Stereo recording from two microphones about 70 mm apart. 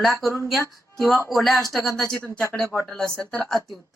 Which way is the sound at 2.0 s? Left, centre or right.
Centre.